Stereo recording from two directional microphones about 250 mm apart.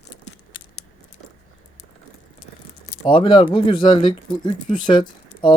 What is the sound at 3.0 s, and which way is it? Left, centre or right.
Speech, centre.